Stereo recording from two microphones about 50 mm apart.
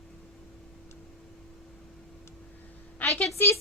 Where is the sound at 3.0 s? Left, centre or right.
Left.